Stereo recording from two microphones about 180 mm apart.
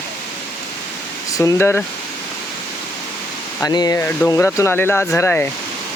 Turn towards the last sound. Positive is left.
turn(degrees=15)  # may be behind; listen again after turning